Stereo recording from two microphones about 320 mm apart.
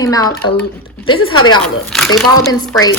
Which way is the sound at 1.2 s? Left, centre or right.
Left.